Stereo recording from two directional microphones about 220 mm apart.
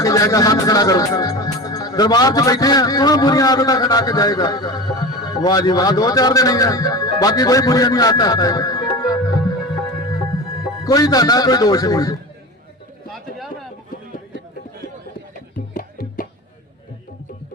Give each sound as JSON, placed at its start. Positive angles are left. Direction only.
{"t": 0.0, "sound": "speech", "side_deg": 15}
{"t": 10.8, "sound": "speech", "side_deg": 15}
{"t": 13.1, "sound": "a sound", "side_deg": 0}
{"t": 15.7, "sound": "music", "side_deg": 40}